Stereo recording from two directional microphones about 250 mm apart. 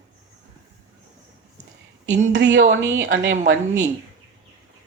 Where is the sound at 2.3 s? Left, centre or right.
Right.